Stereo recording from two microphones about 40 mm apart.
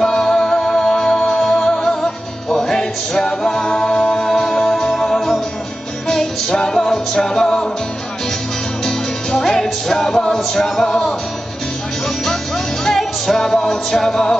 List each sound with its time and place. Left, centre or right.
0.0 s music: centre
9.4 s music: centre
12.8 s music: centre